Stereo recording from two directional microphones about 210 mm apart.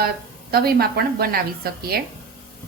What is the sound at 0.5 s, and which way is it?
Speech, 45° right (ahead or behind).